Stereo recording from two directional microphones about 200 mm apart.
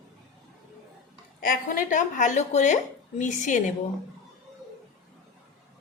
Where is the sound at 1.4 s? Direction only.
45° left (ahead or behind).